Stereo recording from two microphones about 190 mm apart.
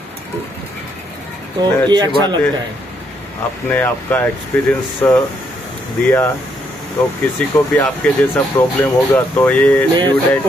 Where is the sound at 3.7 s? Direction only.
10° left (ahead or behind).